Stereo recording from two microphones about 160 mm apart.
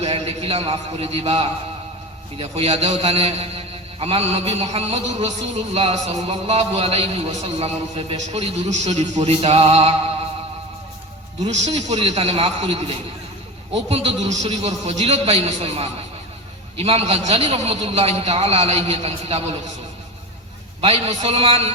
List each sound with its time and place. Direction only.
0.0 s a man's voice: 40° right (ahead or behind)
11.4 s a man's voice: 45° right (ahead or behind)
20.8 s a man's voice: 40° right (ahead or behind)